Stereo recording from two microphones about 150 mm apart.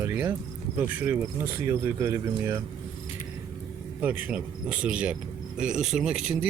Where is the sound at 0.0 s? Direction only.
15° right (ahead or behind).